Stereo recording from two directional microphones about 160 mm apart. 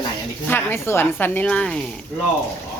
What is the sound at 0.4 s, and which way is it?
A woman's voice, 15° left (ahead or behind).